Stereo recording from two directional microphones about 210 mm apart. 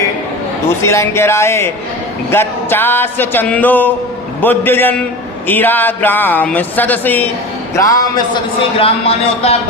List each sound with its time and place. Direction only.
0.8 s speech: 10° left (ahead or behind)
8.8 s speech: 30° left (ahead or behind)